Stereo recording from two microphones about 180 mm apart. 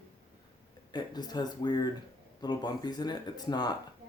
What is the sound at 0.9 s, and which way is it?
Speech, 20° left (ahead or behind).